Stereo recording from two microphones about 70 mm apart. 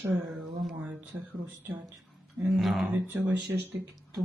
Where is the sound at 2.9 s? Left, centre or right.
Right.